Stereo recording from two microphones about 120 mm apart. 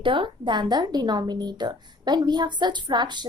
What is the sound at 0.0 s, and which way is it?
A woman's voice, 45° right (ahead or behind).